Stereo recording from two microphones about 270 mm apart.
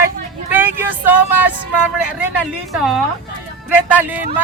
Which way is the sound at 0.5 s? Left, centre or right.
Centre.